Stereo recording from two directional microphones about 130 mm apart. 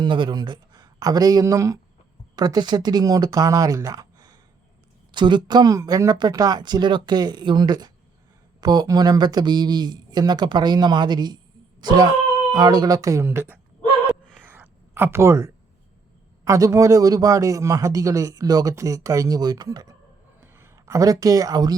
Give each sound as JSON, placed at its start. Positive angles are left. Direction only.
{"t": 0.0, "sound": "a man's voice", "side_deg": -40}
{"t": 14.4, "sound": "a sound", "side_deg": -15}
{"t": 16.4, "sound": "a man's voice", "side_deg": -25}